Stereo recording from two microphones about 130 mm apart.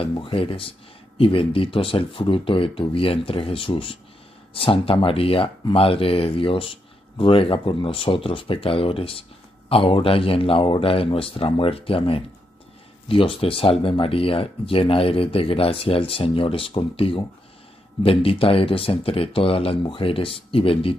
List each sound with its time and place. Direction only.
0.0 s speech: 40° left (ahead or behind)